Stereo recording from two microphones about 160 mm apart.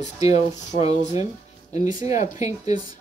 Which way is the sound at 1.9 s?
25° right (ahead or behind).